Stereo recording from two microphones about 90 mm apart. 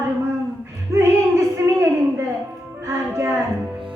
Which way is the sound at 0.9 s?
30° right (ahead or behind).